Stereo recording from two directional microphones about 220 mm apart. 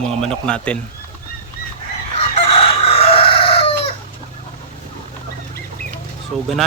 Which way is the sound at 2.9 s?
25° left (ahead or behind).